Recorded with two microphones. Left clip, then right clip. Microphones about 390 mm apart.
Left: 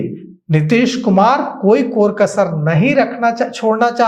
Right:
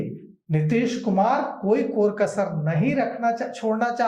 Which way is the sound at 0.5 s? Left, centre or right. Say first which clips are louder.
Left 9 dB; left.